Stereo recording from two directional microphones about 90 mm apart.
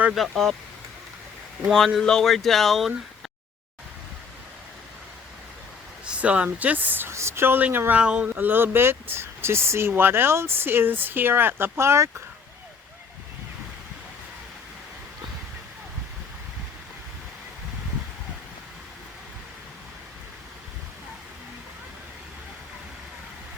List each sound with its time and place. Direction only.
0.1 s speech: centre (ahead or behind)
2.0 s speech: 5° left (ahead or behind)
6.1 s speech: 15° right (ahead or behind); by 12.1 s 30° right (ahead or behind)